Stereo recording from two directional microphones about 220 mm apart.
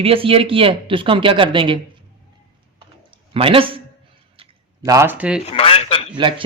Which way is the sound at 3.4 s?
25° right (ahead or behind).